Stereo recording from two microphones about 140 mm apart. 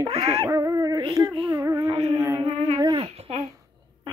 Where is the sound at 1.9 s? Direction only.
40° right (ahead or behind).